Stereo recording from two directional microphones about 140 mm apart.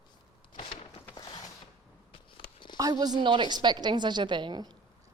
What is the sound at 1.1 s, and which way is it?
Mechanisms, 30° left (ahead or behind).